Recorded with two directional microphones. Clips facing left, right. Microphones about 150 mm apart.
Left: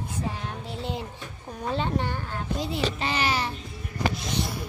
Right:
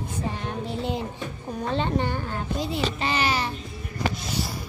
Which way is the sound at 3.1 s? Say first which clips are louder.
Right 3 dB; 60° right (ahead or behind).